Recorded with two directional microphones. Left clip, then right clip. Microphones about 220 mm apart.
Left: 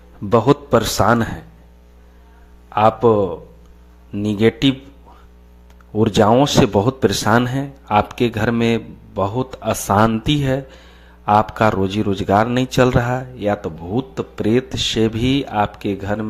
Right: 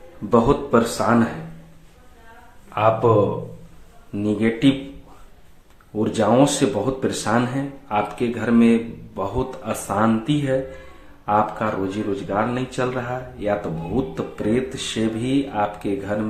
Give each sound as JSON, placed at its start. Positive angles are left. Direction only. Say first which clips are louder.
{"t": 0.3, "sound": "speech", "louder": "left 3 dB", "side_deg": 45}
{"t": 2.7, "sound": "speech", "louder": "left 3 dB", "side_deg": 40}
{"t": 6.0, "sound": "speech", "louder": "left 4 dB", "side_deg": 45}